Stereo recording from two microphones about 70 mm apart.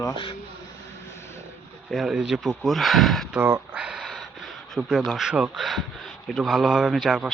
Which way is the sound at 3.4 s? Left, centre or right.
Right.